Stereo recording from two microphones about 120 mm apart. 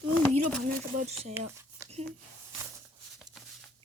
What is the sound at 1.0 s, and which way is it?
Speech, 65° right (ahead or behind).